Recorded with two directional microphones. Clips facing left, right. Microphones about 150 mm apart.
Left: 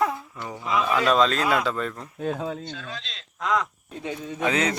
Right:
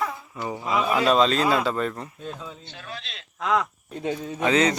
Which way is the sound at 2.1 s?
65° left (ahead or behind).